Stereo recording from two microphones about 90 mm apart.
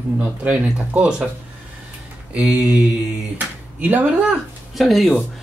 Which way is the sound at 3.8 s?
15° right (ahead or behind).